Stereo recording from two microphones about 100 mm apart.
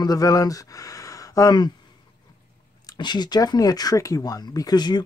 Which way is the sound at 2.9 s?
45° left (ahead or behind).